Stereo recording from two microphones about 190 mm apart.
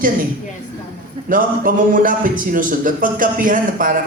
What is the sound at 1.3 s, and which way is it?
Speech, 45° right (ahead or behind).